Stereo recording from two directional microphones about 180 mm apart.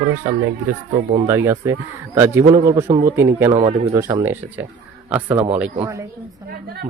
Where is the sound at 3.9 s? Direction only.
25° right (ahead or behind).